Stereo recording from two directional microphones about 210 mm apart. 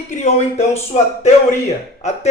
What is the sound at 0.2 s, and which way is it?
Speech, 30° left (ahead or behind).